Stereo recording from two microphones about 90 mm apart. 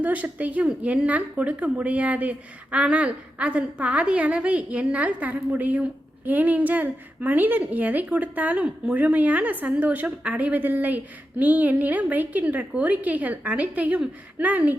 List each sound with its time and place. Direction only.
0.0 s a woman's voice: 15° right (ahead or behind)